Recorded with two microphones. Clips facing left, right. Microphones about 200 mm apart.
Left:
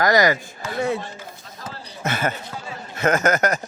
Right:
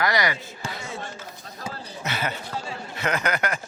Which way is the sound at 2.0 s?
50° left (ahead or behind).